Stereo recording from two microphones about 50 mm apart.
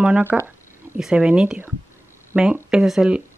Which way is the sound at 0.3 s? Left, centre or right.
Centre.